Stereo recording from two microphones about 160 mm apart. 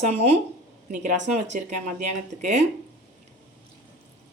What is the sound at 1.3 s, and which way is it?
Speech, 50° right (ahead or behind).